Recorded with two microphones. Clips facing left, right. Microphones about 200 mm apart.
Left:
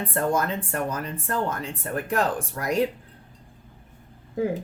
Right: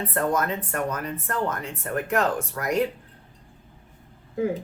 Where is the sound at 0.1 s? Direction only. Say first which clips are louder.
Left 1 dB; 30° left (ahead or behind).